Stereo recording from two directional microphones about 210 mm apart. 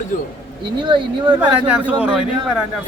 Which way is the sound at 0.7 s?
20° right (ahead or behind).